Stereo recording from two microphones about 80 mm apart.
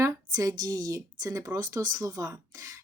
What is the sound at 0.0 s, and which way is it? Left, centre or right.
Speech, right.